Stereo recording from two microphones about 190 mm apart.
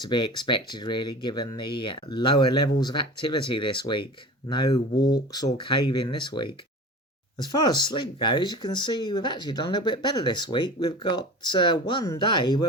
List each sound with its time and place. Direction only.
0.0 s speech: 25° left (ahead or behind)